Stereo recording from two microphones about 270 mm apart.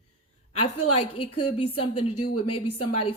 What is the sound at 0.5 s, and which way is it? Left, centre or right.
Speech, left.